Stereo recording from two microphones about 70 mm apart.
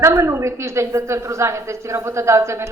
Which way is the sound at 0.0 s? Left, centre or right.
Right.